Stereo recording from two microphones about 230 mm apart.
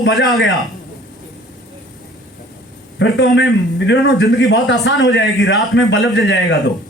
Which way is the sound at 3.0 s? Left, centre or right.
Left.